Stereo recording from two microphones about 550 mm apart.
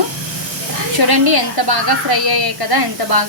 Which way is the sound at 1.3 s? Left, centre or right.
Right.